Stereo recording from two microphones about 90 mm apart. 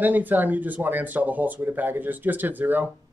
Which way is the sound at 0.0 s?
20° right (ahead or behind).